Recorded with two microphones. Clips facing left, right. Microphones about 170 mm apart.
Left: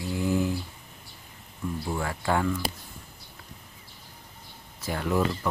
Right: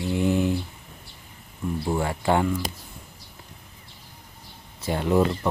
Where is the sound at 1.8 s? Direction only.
25° right (ahead or behind).